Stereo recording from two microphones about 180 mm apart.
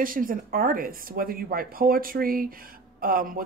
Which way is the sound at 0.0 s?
50° right (ahead or behind).